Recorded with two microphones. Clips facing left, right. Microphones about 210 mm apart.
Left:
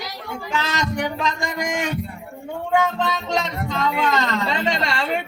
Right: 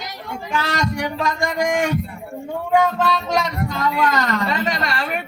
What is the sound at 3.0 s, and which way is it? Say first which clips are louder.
Speech: right 3 dB; 20° left (ahead or behind).